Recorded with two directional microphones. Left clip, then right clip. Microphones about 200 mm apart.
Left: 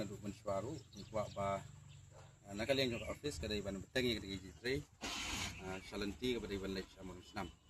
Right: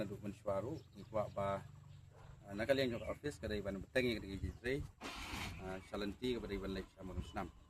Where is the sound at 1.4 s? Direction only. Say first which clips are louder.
Even; 5° right (ahead or behind).